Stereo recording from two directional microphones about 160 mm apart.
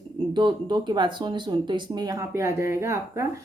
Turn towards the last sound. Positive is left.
turn(degrees=-15)  # may be behind; listen again after turning